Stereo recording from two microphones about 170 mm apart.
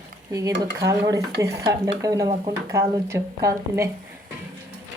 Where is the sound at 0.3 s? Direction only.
20° right (ahead or behind).